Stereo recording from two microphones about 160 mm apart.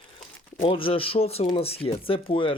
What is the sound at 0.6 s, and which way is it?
Speech, 35° left (ahead or behind).